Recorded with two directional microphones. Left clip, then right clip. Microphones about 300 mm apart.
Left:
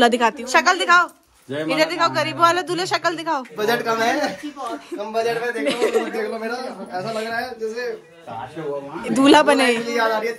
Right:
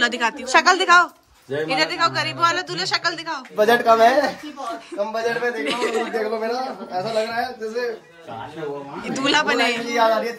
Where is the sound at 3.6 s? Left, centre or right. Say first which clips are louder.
Right 6 dB; centre.